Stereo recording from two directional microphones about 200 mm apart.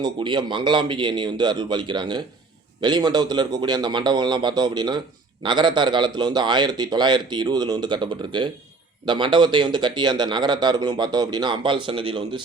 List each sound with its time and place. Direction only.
0.0 s a man's voice: 25° right (ahead or behind)